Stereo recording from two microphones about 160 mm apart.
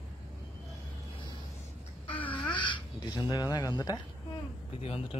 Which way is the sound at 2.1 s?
10° left (ahead or behind).